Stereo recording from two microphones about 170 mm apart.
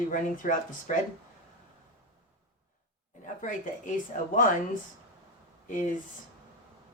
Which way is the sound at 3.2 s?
50° left (ahead or behind).